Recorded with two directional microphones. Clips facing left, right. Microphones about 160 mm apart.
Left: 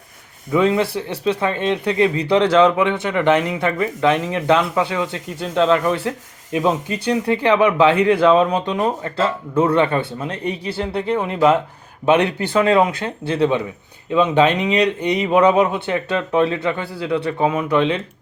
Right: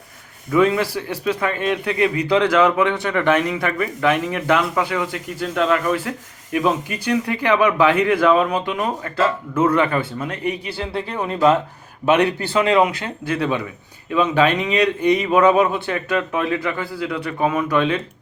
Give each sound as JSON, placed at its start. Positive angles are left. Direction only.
{"t": 0.5, "sound": "speech", "side_deg": 20}